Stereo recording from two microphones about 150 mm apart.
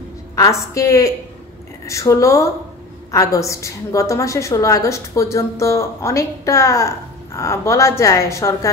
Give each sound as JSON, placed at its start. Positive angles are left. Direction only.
{"t": 0.7, "sound": "a woman's voice", "side_deg": 20}